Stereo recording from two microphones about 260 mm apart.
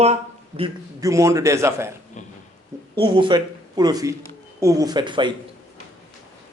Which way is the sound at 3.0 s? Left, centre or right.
Centre.